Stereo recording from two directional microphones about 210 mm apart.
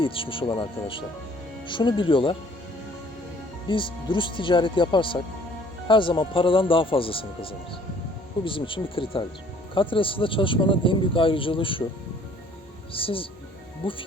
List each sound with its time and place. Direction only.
0.0 s speech: 25° left (ahead or behind)
3.7 s speech: 25° left (ahead or behind)
12.9 s speech: 25° left (ahead or behind)